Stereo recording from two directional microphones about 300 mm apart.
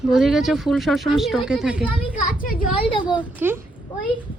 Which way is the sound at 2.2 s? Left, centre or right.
Left.